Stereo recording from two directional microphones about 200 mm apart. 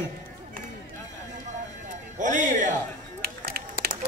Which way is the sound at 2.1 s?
40° right (ahead or behind).